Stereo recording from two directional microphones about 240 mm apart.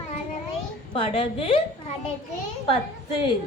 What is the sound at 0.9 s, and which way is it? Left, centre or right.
Speech, left.